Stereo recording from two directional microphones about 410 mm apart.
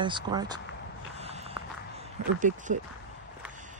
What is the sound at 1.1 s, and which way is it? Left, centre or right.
Walk, centre.